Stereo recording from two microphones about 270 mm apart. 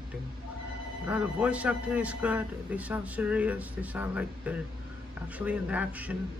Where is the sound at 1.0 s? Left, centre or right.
Centre.